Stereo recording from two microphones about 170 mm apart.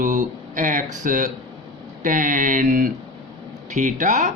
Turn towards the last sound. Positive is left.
turn(degrees=-45)  # may be behind; listen again after turning